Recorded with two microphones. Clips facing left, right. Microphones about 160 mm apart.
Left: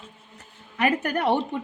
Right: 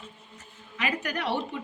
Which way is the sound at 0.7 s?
55° left (ahead or behind).